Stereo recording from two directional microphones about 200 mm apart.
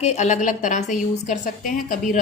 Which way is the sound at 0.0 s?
35° left (ahead or behind).